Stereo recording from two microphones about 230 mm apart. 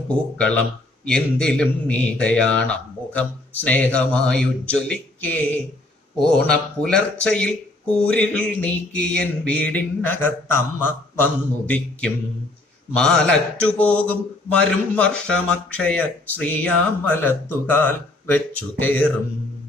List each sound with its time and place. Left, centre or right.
0.1 s speech: centre